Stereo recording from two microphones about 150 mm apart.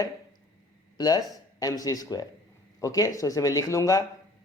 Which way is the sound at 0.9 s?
25° left (ahead or behind).